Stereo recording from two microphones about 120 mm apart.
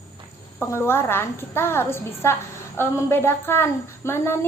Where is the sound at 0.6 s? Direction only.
20° left (ahead or behind).